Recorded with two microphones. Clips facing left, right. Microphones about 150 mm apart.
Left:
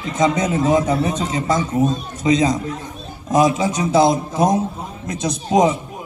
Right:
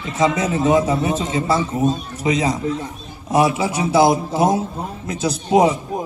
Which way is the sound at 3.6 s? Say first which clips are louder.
Even; 30° right (ahead or behind).